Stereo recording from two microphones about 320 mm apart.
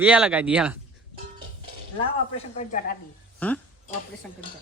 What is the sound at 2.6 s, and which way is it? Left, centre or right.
Speech, left.